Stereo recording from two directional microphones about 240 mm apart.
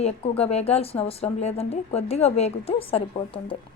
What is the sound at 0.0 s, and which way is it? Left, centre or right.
A woman's voice, left.